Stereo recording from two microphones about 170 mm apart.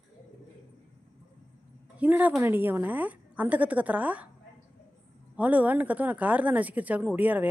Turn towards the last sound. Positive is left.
turn(degrees=-10)  # may be behind; listen again after turning